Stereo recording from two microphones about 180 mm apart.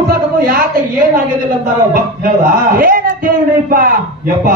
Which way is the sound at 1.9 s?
50° right (ahead or behind).